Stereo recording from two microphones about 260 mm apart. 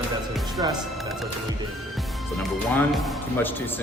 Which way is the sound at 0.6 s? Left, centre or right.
Centre.